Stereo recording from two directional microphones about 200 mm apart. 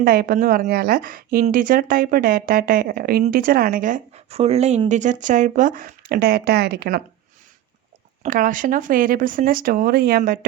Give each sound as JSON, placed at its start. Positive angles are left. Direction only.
{"t": 0.0, "sound": "a woman's voice", "side_deg": -50}
{"t": 8.2, "sound": "a woman's voice", "side_deg": -40}